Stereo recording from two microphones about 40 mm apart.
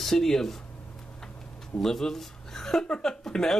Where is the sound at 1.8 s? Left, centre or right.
Centre.